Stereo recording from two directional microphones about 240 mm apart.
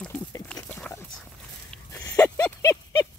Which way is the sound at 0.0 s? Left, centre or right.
Centre.